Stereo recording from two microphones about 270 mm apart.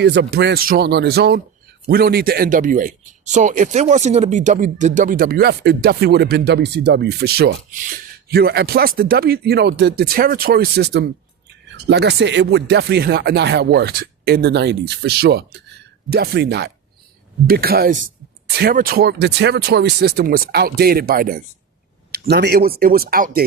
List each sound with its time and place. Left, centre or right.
0.0 s speech: right